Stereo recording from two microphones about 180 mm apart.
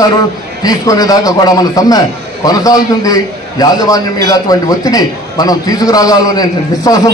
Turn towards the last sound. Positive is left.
turn(degrees=20)  # may be behind; listen again after turning